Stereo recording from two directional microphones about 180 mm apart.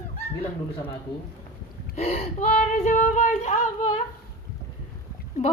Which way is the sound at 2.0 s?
35° left (ahead or behind).